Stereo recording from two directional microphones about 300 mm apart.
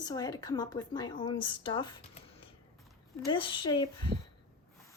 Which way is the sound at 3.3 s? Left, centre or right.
Centre.